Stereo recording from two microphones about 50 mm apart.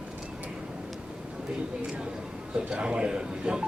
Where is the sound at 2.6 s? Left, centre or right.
Right.